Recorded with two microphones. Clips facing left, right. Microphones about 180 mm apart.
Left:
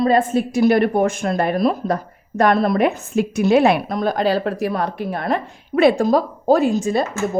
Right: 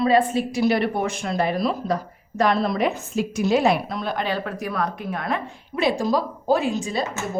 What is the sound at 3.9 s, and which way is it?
Speech, 45° left (ahead or behind).